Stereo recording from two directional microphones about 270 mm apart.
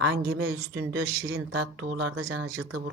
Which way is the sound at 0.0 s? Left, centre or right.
Right.